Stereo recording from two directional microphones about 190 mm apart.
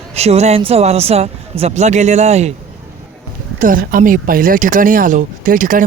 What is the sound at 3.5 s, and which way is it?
A man's voice, 45° right (ahead or behind).